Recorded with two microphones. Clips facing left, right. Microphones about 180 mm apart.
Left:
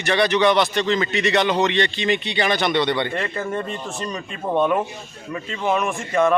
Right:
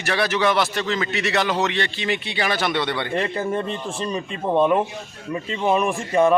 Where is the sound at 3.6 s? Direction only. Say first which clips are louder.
Right 1 dB; 30° right (ahead or behind).